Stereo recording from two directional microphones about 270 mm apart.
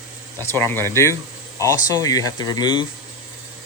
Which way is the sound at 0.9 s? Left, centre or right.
Centre.